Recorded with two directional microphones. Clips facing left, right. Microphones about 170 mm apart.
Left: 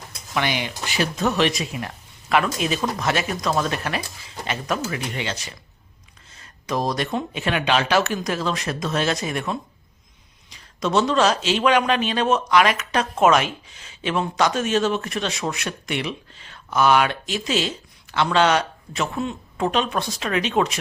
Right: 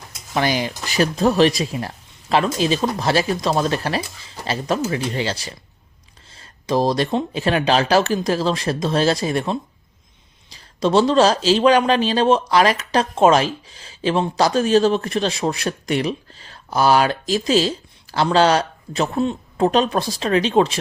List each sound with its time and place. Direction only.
0.3 s speech: 35° right (ahead or behind)